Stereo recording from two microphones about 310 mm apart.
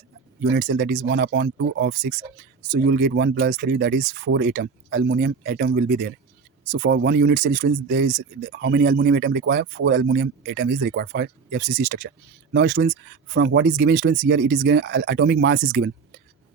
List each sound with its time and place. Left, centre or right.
0.5 s speech: right